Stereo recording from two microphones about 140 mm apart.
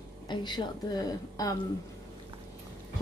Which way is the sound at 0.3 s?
35° left (ahead or behind).